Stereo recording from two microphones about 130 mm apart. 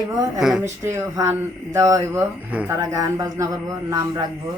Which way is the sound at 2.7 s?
25° right (ahead or behind).